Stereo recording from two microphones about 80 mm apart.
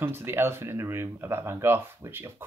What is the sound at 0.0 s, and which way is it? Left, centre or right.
Speech, right.